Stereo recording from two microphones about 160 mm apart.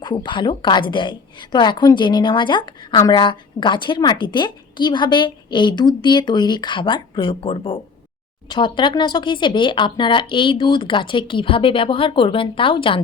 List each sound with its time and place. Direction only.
0.0 s a woman's voice: 30° left (ahead or behind)